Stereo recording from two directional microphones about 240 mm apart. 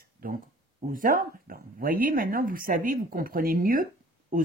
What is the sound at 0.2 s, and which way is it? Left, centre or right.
Speech, right.